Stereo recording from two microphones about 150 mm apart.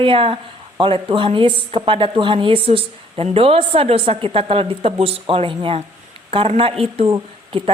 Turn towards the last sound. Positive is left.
turn(degrees=-35)  # may be behind; listen again after turning